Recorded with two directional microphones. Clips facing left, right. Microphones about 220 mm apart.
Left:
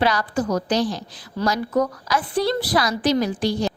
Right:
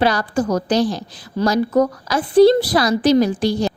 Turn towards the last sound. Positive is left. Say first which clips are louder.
# right 5 dB
turn(degrees=-35)  # may be behind; listen again after turning